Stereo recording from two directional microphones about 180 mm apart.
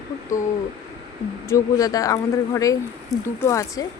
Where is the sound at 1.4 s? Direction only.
20° left (ahead or behind).